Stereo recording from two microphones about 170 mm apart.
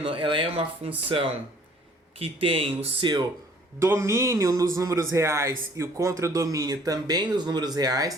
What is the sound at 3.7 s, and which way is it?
A man's voice, 15° right (ahead or behind).